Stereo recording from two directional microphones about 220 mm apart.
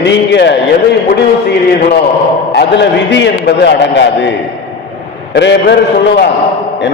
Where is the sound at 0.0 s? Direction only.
50° left (ahead or behind).